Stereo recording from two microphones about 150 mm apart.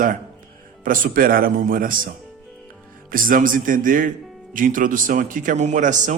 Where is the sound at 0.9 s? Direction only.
65° right (ahead or behind).